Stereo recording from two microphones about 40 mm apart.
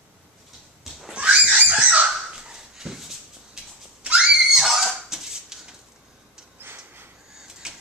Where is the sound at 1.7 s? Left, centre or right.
Right.